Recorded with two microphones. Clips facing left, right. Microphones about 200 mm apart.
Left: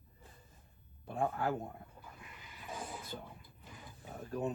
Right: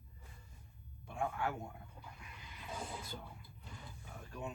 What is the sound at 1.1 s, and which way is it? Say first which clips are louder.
Speech: left 4 dB; 35° left (ahead or behind).